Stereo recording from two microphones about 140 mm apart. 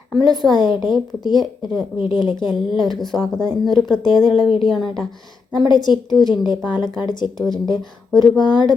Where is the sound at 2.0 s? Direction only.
35° left (ahead or behind).